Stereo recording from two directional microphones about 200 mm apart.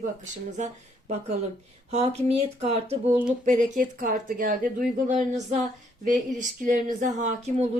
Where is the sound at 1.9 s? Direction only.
35° right (ahead or behind).